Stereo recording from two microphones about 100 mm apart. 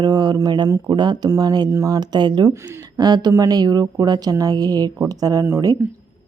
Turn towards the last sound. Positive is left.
turn(degrees=-30)  # may be behind; listen again after turning